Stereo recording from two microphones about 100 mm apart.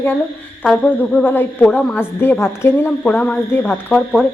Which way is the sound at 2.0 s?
25° left (ahead or behind).